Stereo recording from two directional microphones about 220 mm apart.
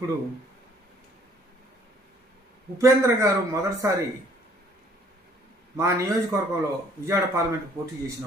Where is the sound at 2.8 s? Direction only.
15° right (ahead or behind).